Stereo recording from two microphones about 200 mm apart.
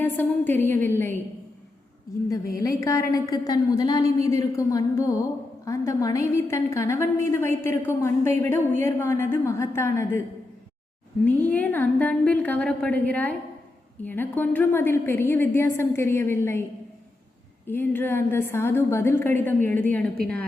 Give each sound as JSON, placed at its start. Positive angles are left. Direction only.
{"t": 0.0, "sound": "a woman's voice", "side_deg": 10}
{"t": 2.6, "sound": "a woman's voice", "side_deg": 15}
{"t": 11.3, "sound": "a woman's voice", "side_deg": 10}
{"t": 17.7, "sound": "a woman's voice", "side_deg": 10}